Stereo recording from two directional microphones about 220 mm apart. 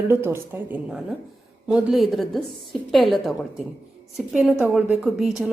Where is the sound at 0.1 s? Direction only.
10° right (ahead or behind).